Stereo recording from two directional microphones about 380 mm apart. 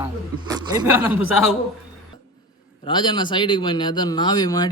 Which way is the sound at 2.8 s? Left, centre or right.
Centre.